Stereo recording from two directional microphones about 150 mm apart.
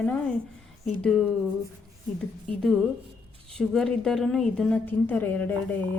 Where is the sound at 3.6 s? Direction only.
Centre (ahead or behind).